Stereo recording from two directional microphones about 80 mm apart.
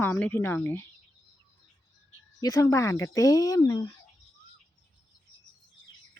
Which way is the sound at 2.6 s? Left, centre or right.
Left.